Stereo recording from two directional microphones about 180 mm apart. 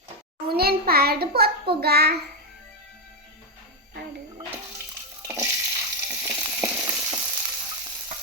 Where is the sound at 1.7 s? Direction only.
60° right (ahead or behind).